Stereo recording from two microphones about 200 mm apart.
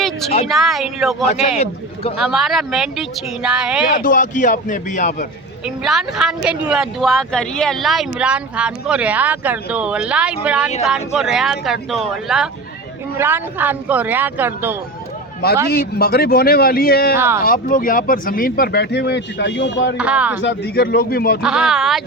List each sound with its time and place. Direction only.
0.4 s speech: centre (ahead or behind)
1.3 s speech: 30° left (ahead or behind)
2.1 s speech: centre (ahead or behind)
3.9 s speech: 40° left (ahead or behind)
5.6 s speech: centre (ahead or behind)
15.7 s speech: 50° left (ahead or behind)
17.2 s speech: 10° right (ahead or behind)
17.4 s speech: 45° left (ahead or behind); by 20.0 s 60° left (ahead or behind)
20.0 s speech: 5° right (ahead or behind)
20.4 s speech: 55° left (ahead or behind)
21.4 s speech: 5° right (ahead or behind)